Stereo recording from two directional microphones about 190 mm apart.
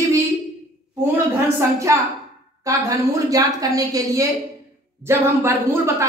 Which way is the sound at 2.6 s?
15° right (ahead or behind).